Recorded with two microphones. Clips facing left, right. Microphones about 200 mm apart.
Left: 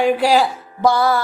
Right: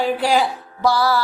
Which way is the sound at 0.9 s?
50° left (ahead or behind).